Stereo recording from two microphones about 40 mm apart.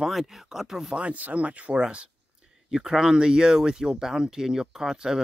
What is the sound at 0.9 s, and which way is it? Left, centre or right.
Speech, right.